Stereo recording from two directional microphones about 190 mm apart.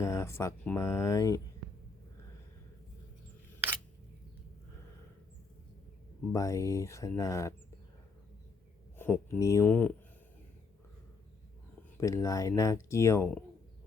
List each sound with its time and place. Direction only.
0.0 s speech: 15° left (ahead or behind)
6.3 s speech: 15° left (ahead or behind)
9.0 s speech: 10° left (ahead or behind)
11.9 s speech: 15° left (ahead or behind)